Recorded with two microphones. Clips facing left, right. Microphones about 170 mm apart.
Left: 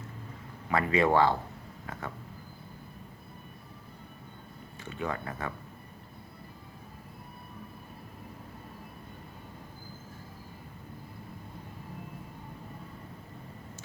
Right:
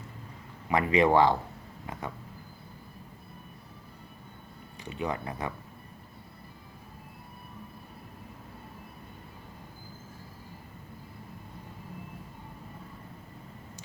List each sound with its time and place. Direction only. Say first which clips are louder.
0.7 s speech: right 2 dB; 15° right (ahead or behind)
4.8 s speech: right 2 dB; 15° right (ahead or behind)